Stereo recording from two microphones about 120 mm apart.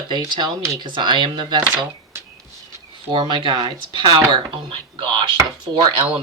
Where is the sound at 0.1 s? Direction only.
40° right (ahead or behind).